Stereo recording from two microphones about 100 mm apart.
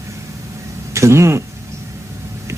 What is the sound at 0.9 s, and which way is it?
Speech, 30° right (ahead or behind).